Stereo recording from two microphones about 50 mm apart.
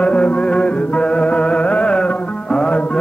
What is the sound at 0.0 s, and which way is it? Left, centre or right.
Music, left.